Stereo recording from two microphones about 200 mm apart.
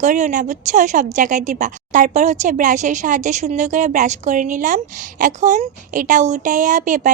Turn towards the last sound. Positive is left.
turn(degrees=-40)  # may be behind; listen again after turning